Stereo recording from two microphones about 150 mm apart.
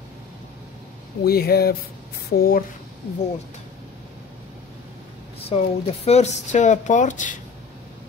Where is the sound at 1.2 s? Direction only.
90° left.